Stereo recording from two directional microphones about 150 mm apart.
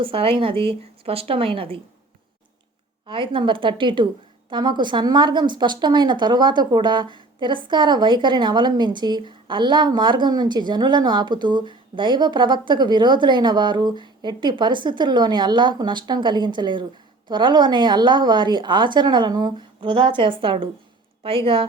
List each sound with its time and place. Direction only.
0.0 s a woman's voice: 35° right (ahead or behind)
3.1 s a woman's voice: 35° right (ahead or behind)